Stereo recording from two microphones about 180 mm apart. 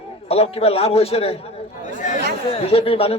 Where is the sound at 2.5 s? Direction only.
30° left (ahead or behind).